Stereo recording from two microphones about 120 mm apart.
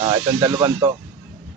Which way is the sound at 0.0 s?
35° right (ahead or behind).